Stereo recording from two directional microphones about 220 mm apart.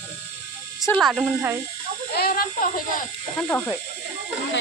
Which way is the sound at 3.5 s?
10° left (ahead or behind).